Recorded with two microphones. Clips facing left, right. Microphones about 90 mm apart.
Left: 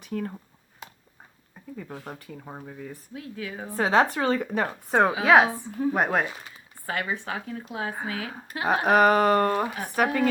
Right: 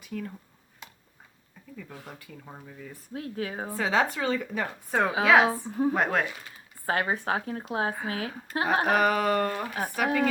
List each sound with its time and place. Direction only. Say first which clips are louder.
0.0 s speech: left 5 dB; 45° left (ahead or behind)
1.7 s speech: left 5 dB; 45° left (ahead or behind)
2.6 s a woman's voice: left 5 dB; 45° left (ahead or behind)
3.1 s speech: right 5 dB; 40° right (ahead or behind)
3.8 s a woman's voice: left 5 dB; 45° left (ahead or behind)
5.2 s speech: left 1 dB; 30° left (ahead or behind)
5.5 s speech: right 1 dB; 35° right (ahead or behind)
5.9 s speech: left 4 dB; 20° left (ahead or behind)
6.8 s speech: right 3 dB; 35° right (ahead or behind)
8.9 s a woman's voice: left 8 dB; 45° left (ahead or behind)